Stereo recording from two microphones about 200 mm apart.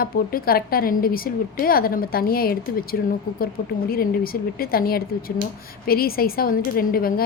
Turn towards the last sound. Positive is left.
turn(degrees=45)  # may be behind; listen again after turning